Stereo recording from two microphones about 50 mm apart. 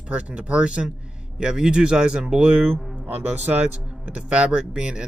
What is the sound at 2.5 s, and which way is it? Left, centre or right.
Speech, right.